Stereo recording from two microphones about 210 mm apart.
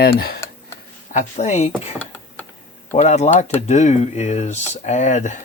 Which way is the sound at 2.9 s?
35° left (ahead or behind).